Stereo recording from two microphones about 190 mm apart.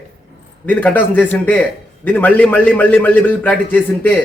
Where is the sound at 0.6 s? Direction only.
10° left (ahead or behind).